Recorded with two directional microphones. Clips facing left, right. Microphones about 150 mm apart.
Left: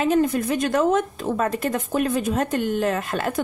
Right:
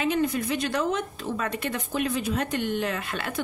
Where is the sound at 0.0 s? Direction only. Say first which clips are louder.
Left 5 dB; 45° left (ahead or behind).